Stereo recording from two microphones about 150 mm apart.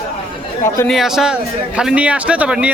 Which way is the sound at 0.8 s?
Centre (ahead or behind).